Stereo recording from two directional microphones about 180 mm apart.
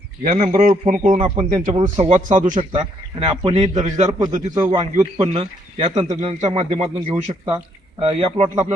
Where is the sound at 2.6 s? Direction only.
30° right (ahead or behind).